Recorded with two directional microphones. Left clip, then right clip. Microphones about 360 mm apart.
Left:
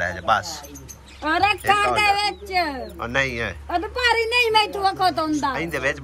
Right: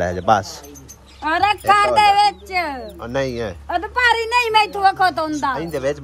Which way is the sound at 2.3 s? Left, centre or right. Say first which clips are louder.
Right 3 dB; centre.